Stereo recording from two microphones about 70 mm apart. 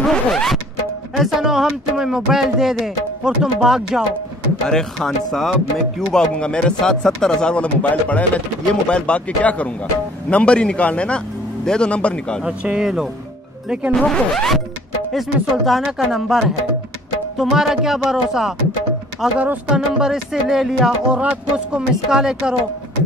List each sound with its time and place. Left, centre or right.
0.0 s zipper: centre
1.1 s speech: centre
4.6 s a man's voice: centre
12.4 s music: centre
13.9 s a man's voice: centre
17.4 s music: centre
19.3 s speech: right
19.7 s music: centre